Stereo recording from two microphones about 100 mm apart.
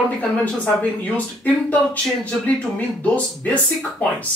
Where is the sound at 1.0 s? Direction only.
15° left (ahead or behind).